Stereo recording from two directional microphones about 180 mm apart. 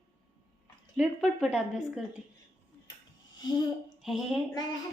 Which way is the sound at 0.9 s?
5° right (ahead or behind).